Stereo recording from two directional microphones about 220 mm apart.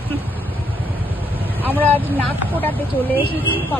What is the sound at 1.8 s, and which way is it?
Speech, 10° left (ahead or behind).